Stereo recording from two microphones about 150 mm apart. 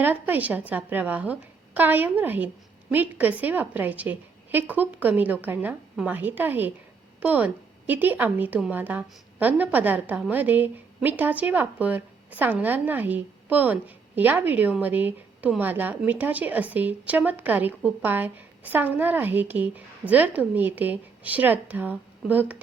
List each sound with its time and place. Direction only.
0.0 s a woman's voice: 10° right (ahead or behind)